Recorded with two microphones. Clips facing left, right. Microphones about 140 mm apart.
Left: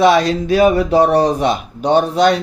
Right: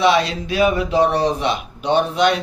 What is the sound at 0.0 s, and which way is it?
Speech, 45° left (ahead or behind).